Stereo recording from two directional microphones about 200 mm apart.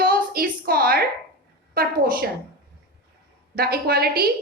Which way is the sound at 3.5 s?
50° right (ahead or behind).